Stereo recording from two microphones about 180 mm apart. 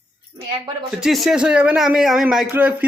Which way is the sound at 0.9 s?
Centre (ahead or behind).